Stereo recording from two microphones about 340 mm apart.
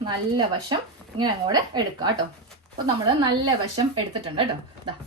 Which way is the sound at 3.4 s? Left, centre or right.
Centre.